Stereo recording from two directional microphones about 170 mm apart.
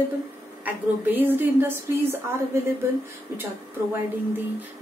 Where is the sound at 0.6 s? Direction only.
10° right (ahead or behind).